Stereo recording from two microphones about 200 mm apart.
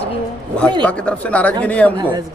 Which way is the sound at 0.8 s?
5° left (ahead or behind).